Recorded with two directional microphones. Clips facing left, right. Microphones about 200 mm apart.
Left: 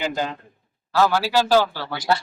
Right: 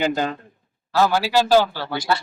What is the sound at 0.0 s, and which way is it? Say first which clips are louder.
Speech: right 4 dB; 55° right (ahead or behind).